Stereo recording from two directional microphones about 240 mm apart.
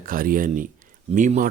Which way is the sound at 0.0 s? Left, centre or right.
Right.